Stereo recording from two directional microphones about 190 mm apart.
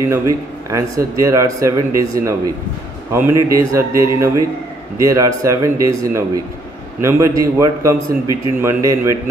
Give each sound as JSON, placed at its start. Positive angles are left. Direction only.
{"t": 0.7, "sound": "a man's voice", "side_deg": -15}